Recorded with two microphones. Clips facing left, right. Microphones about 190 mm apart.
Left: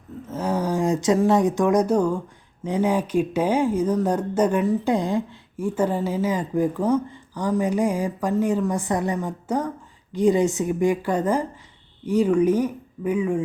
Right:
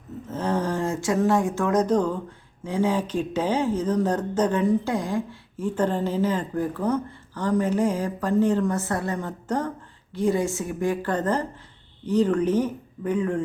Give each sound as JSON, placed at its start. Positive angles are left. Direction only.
{"t": 0.3, "sound": "speech", "side_deg": 10}
{"t": 4.9, "sound": "speech", "side_deg": 20}
{"t": 5.6, "sound": "speech", "side_deg": 10}